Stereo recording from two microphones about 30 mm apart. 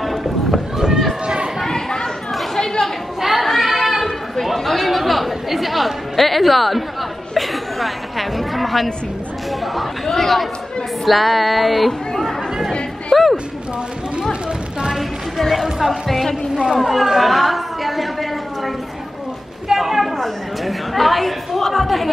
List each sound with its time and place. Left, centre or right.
0.0 s run: centre
1.2 s chatter: right
1.7 s chatter: left
3.2 s chatter: centre
10.1 s female singing: centre
13.1 s music: centre
15.0 s music: centre
15.6 s female singing: centre
16.5 s speech: right
16.8 s female singing: centre
17.2 s a sound: centre
19.8 s a sound: centre
20.6 s chatter: centre
21.5 s speech: centre